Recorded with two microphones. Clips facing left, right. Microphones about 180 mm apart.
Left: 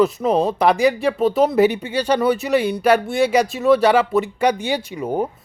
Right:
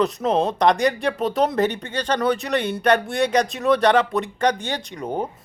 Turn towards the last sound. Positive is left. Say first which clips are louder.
# left 5 dB
turn(degrees=5)  # may be behind; listen again after turning